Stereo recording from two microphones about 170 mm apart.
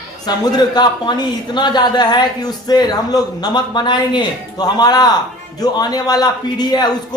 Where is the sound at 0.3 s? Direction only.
25° left (ahead or behind).